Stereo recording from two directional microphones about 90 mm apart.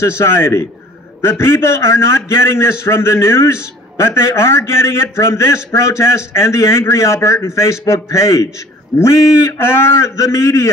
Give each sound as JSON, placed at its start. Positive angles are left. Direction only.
{"t": 0.0, "sound": "a man's voice", "side_deg": 30}